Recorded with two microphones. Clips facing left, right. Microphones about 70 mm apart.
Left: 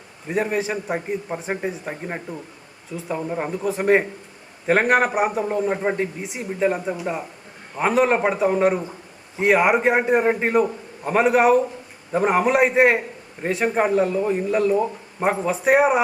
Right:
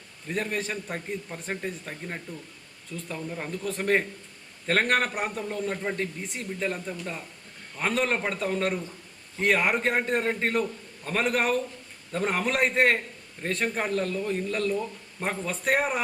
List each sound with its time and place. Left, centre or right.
0.3 s a man's voice: centre
0.9 s a man's voice: left
1.4 s a man's voice: centre
2.9 s a man's voice: centre
3.2 s a man's voice: left
3.5 s a man's voice: centre
6.0 s a man's voice: centre